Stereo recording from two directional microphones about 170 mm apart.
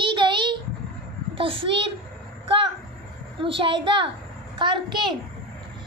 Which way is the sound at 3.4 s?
30° right (ahead or behind).